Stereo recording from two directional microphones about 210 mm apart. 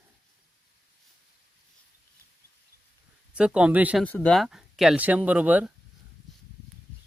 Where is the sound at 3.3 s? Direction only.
5° right (ahead or behind).